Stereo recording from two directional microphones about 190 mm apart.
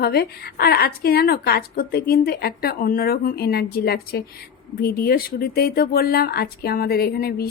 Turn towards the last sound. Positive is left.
turn(degrees=55)  # may be behind; listen again after turning